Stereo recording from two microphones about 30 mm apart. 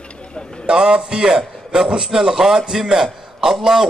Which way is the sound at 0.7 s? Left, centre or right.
Right.